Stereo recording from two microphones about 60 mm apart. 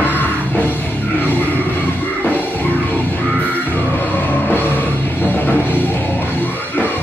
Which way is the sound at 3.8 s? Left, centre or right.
Left.